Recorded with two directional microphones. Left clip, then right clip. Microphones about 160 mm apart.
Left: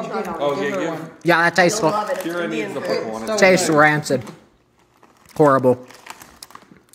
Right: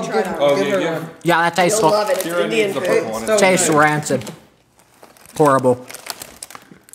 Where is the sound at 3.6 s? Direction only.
5° left (ahead or behind).